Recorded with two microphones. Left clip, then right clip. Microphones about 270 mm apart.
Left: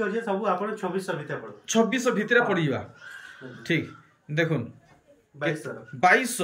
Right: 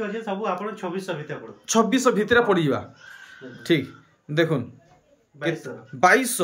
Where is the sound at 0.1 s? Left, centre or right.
Centre.